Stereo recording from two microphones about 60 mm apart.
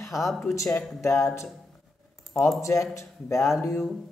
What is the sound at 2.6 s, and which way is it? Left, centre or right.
Speech, left.